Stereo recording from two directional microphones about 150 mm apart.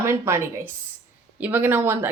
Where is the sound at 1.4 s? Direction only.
15° right (ahead or behind).